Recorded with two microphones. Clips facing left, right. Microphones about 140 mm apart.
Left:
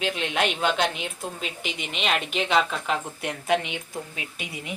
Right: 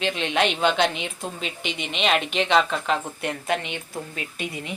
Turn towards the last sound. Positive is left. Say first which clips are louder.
# right 4 dB
turn(degrees=5)  # may be behind; listen again after turning